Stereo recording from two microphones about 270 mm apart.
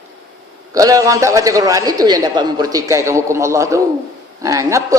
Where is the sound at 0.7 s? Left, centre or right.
Centre.